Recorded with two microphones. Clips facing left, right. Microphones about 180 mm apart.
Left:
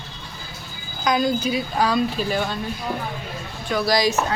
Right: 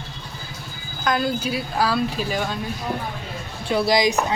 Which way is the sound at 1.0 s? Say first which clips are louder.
Left 2 dB; 5° right (ahead or behind).